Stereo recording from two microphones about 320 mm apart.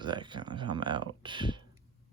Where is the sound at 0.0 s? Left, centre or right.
Centre.